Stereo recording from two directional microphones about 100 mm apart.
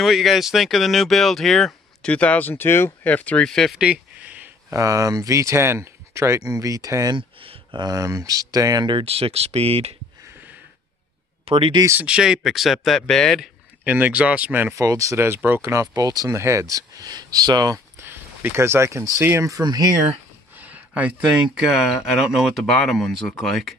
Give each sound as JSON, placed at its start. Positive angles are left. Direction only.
{"t": 0.0, "sound": "speech", "side_deg": 0}
{"t": 3.7, "sound": "a sound", "side_deg": -10}
{"t": 4.7, "sound": "speech", "side_deg": -35}
{"t": 7.2, "sound": "a sound", "side_deg": -55}
{"t": 7.9, "sound": "speech", "side_deg": -35}
{"t": 8.8, "sound": "speech", "side_deg": -65}
{"t": 11.4, "sound": "speech", "side_deg": -65}
{"t": 12.0, "sound": "speech", "side_deg": -10}
{"t": 13.8, "sound": "speech", "side_deg": -15}
{"t": 14.8, "sound": "speech", "side_deg": -30}
{"t": 17.9, "sound": "a sound", "side_deg": -20}
{"t": 19.1, "sound": "speech", "side_deg": -30}
{"t": 20.5, "sound": "speech", "side_deg": -15}